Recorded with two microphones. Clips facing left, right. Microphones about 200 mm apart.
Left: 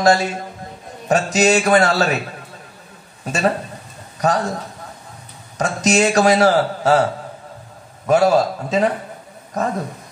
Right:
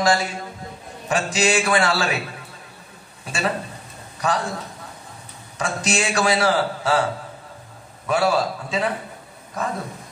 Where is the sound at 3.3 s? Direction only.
40° left (ahead or behind).